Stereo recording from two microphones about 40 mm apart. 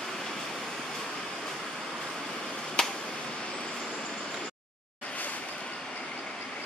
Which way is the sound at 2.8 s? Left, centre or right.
Left.